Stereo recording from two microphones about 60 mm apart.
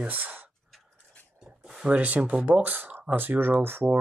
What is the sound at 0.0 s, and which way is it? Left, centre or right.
Speech, right.